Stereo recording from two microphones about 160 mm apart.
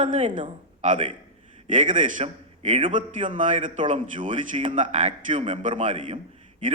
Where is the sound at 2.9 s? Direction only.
50° right (ahead or behind).